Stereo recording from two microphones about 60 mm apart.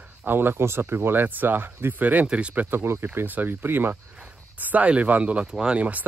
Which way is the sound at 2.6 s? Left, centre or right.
Right.